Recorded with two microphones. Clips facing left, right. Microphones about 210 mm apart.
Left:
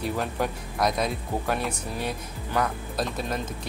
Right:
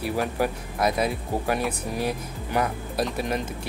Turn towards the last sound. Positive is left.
turn(degrees=-10)  # may be behind; listen again after turning